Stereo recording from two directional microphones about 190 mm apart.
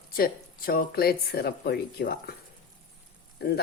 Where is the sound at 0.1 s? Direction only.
50° left (ahead or behind).